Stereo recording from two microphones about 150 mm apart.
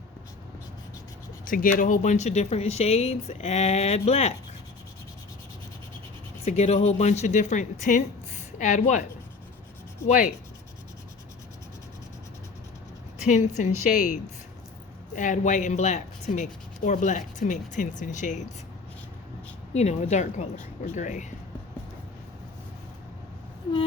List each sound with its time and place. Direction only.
1.5 s speech: 65° left (ahead or behind); by 4.4 s 45° left (ahead or behind)
6.4 s speech: 45° left (ahead or behind)
10.1 s speech: 60° left (ahead or behind)
13.2 s speech: 55° left (ahead or behind)
19.7 s speech: 50° left (ahead or behind)